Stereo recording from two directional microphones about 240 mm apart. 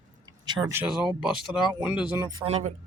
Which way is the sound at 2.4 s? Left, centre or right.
Right.